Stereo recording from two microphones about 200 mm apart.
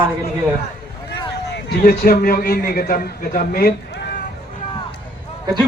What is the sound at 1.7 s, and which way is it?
A man's voice, 50° left (ahead or behind).